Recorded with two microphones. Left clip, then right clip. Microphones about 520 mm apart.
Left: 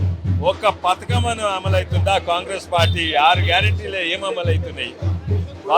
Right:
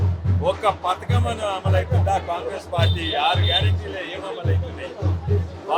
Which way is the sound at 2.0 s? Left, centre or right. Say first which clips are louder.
Left 4 dB; left.